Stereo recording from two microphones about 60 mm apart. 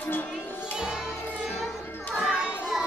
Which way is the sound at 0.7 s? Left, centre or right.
Centre.